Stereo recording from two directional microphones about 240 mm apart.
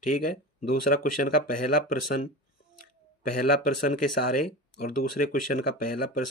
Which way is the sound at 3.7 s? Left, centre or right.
Left.